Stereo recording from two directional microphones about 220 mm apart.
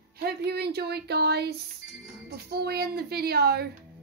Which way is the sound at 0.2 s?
45° right (ahead or behind).